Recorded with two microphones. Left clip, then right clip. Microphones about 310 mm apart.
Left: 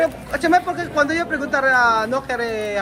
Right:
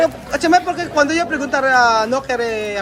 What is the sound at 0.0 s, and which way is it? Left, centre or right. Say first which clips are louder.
Speech: right 3 dB; centre.